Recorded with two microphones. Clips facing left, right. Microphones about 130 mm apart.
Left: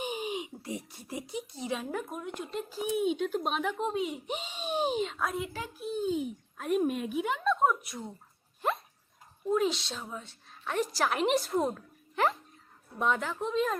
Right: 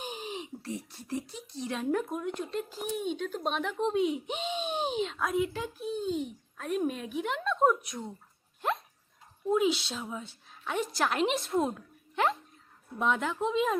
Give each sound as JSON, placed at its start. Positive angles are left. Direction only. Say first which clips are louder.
{"t": 0.0, "sound": "speech", "louder": "left 4 dB", "side_deg": 10}
{"t": 8.6, "sound": "dog", "louder": "even", "side_deg": 0}
{"t": 9.5, "sound": "speech", "louder": "right 2 dB", "side_deg": -5}